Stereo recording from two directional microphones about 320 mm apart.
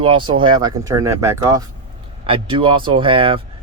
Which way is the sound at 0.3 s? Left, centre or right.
Centre.